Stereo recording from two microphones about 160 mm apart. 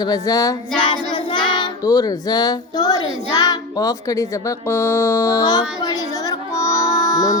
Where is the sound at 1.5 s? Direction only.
25° left (ahead or behind).